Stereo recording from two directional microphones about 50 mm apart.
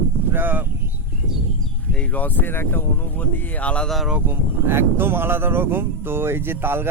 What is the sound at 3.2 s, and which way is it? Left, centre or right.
Speech, left.